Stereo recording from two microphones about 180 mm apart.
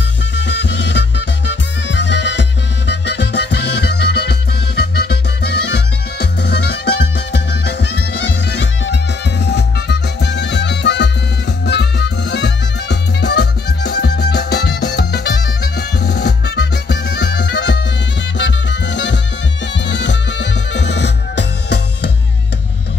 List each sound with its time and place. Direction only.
0.4 s music: 75° left (ahead or behind)
5.4 s music: 70° left (ahead or behind)